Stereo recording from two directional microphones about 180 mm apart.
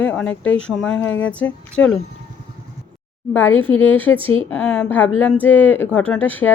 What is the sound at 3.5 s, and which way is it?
Speech, 90° left.